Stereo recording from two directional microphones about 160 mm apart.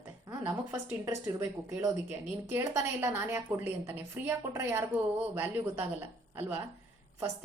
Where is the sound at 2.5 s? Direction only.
20° right (ahead or behind).